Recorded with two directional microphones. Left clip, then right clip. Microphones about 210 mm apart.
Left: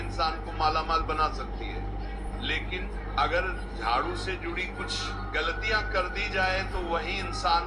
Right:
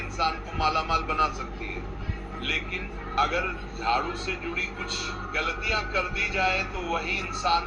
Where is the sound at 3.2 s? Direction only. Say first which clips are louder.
Right 1 dB; 10° right (ahead or behind).